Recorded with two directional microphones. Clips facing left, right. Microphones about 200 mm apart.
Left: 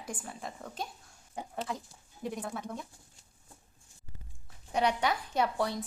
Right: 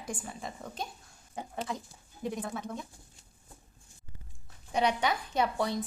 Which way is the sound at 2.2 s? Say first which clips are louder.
Right 2 dB; 5° left (ahead or behind).